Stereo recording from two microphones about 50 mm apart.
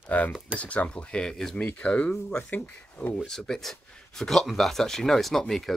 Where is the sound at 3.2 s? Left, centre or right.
Centre.